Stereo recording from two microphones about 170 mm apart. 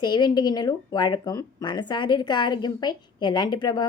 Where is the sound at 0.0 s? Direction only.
25° left (ahead or behind).